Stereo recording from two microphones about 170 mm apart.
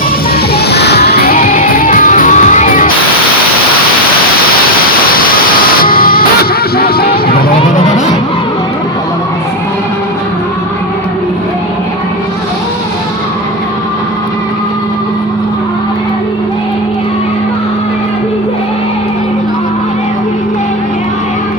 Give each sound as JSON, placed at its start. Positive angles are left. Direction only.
{"t": 0.5, "sound": "music", "side_deg": 75}
{"t": 4.8, "sound": "music", "side_deg": 60}